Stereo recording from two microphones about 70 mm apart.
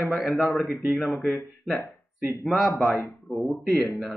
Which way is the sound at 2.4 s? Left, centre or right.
Centre.